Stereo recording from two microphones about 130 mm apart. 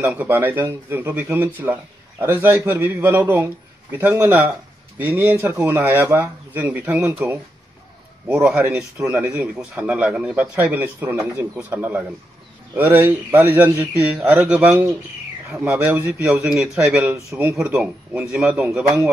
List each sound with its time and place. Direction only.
0.0 s a man's voice: 15° right (ahead or behind)
8.3 s a man's voice: 5° right (ahead or behind)
14.4 s a man's voice: 5° right (ahead or behind)
17.1 s a man's voice: 15° right (ahead or behind)
17.6 s a man's voice: 5° right (ahead or behind)